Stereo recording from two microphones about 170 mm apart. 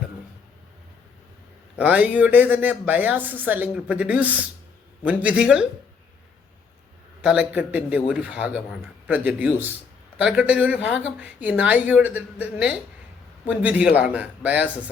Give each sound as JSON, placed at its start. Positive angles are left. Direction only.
{"t": 1.8, "sound": "speech", "side_deg": -10}
{"t": 7.2, "sound": "speech", "side_deg": -5}